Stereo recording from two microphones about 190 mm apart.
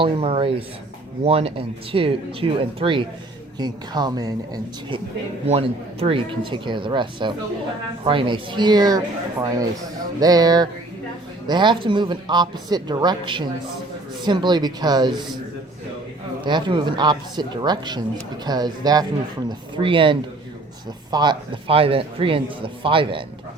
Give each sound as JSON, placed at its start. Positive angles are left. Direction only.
{"t": 0.0, "sound": "a man's voice", "side_deg": -25}
{"t": 5.5, "sound": "a man's voice", "side_deg": -30}
{"t": 16.4, "sound": "a man's voice", "side_deg": -25}